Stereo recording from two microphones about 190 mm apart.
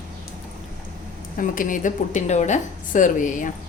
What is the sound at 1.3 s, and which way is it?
A woman's voice, 45° left (ahead or behind).